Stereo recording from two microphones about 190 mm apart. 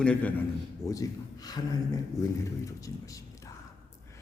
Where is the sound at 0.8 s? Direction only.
20° left (ahead or behind).